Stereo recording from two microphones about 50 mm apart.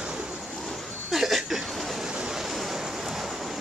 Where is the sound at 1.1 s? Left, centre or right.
Centre.